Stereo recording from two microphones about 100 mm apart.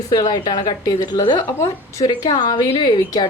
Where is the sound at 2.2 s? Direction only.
45° left (ahead or behind).